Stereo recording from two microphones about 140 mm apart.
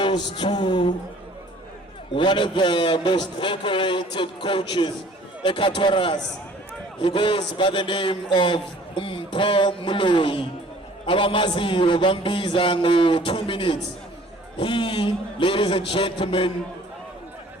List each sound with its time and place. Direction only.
0.0 s a man's voice: 35° left (ahead or behind)
2.1 s a man's voice: 35° left (ahead or behind)